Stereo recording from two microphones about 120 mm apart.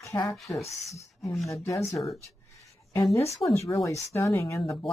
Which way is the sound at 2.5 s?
25° left (ahead or behind).